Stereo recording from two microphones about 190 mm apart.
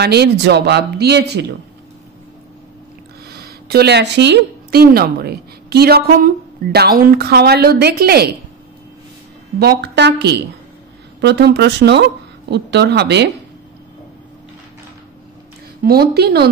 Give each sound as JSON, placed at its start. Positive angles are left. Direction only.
{"t": 0.0, "sound": "speech", "side_deg": -60}
{"t": 3.3, "sound": "speech", "side_deg": -55}
{"t": 9.6, "sound": "speech", "side_deg": -60}
{"t": 15.8, "sound": "speech", "side_deg": -55}